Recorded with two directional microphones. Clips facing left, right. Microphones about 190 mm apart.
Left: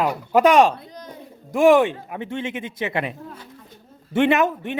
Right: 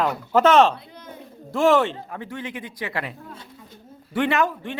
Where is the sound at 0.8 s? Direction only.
40° left (ahead or behind).